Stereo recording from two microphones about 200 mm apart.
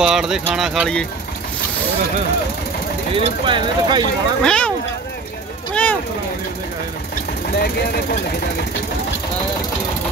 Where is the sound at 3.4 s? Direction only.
25° right (ahead or behind).